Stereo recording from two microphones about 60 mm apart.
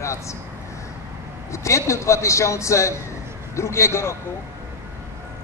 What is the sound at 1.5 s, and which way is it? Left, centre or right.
A man's voice, left.